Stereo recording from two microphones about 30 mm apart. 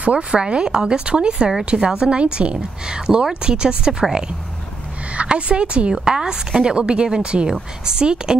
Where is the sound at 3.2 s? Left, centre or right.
Right.